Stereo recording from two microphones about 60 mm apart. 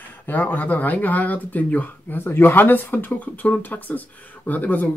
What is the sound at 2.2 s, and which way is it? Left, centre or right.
Speech, left.